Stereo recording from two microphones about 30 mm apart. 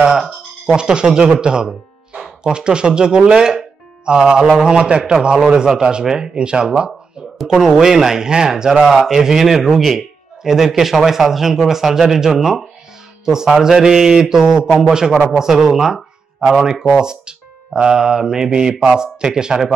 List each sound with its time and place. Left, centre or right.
0.7 s a man's voice: right
6.0 s a man's voice: centre
6.3 s speech: right
7.4 s a man's voice: centre